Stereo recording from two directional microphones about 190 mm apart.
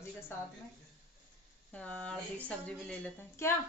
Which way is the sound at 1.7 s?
5° left (ahead or behind).